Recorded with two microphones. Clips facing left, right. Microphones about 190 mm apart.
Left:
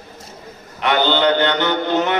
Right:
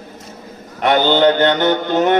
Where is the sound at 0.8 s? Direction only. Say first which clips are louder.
Right 4 dB; 45° right (ahead or behind).